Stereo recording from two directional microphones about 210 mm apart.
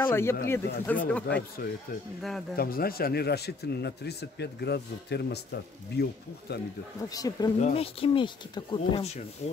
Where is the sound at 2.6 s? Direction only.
45° left (ahead or behind).